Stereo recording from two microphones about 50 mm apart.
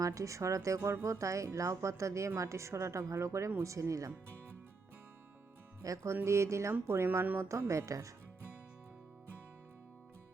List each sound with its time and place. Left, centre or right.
0.1 s a woman's voice: right
3.6 s speech: right
5.8 s a woman's voice: right
6.8 s speech: right
7.3 s a woman's voice: right